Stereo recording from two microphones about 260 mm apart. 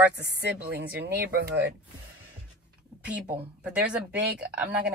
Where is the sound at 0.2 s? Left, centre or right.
Right.